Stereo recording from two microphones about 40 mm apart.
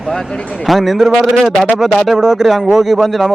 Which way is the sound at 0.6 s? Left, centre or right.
Centre.